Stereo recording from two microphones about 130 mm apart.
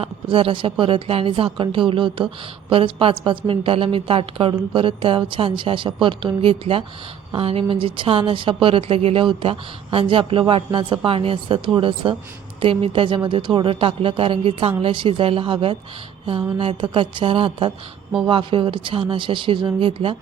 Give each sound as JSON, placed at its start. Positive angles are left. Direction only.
{"t": 0.0, "sound": "a woman's voice", "side_deg": -45}